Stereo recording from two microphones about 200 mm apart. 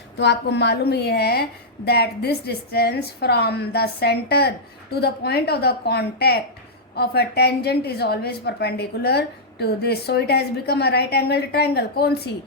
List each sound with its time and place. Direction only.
0.2 s a woman's voice: 60° left (ahead or behind)